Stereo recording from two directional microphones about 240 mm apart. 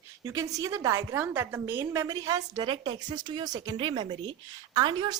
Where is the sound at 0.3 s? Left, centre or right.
Centre.